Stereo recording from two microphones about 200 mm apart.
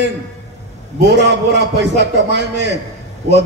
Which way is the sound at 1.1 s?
60° right (ahead or behind).